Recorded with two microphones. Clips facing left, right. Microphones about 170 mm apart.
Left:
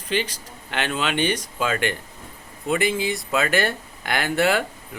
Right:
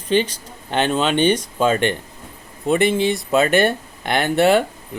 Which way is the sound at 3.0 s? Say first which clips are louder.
Right 6 dB; 25° right (ahead or behind).